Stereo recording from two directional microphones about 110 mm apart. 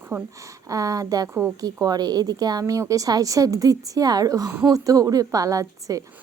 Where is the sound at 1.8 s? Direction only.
35° right (ahead or behind).